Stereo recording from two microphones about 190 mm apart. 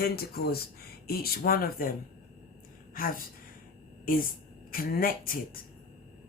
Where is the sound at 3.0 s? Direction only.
50° left (ahead or behind).